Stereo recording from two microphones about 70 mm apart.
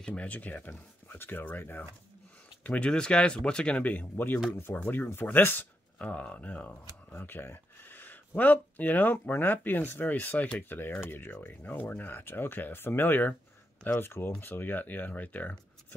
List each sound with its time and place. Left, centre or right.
0.0 s speech: centre
2.6 s speech: centre
6.0 s speech: centre
7.1 s a sound: left
8.4 s speech: left